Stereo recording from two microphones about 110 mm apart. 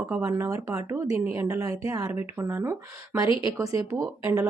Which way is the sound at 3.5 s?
30° right (ahead or behind).